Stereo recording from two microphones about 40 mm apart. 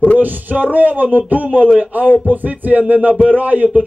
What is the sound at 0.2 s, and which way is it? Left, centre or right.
A man's voice, right.